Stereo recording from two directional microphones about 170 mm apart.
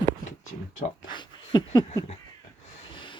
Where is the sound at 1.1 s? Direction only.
25° left (ahead or behind).